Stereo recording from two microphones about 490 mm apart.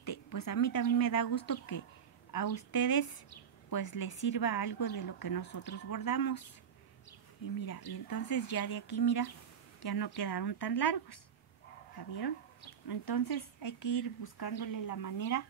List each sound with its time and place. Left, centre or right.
0.0 s a woman's voice: left
8.1 s a woman's voice: left
12.8 s a woman's voice: left